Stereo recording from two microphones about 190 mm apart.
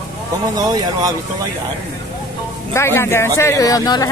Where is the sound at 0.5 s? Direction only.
20° right (ahead or behind).